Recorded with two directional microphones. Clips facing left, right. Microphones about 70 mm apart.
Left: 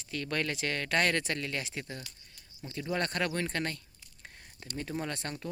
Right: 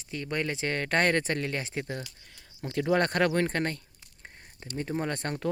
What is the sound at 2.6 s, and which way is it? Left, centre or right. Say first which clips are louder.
Speech: right 8 dB; right.